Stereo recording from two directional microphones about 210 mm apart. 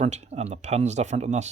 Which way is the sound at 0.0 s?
30° right (ahead or behind).